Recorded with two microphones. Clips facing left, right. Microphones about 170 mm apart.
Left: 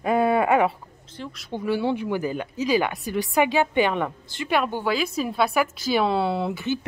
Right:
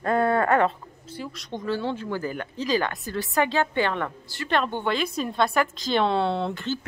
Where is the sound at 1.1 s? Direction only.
5° right (ahead or behind).